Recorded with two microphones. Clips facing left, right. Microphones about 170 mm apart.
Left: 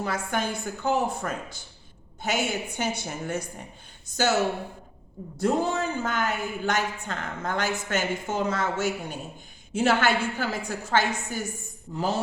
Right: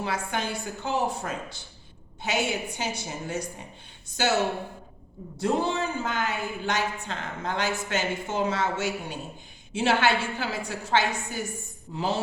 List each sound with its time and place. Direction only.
0.0 s speech: 45° left (ahead or behind)
5.4 s speech: 45° left (ahead or behind)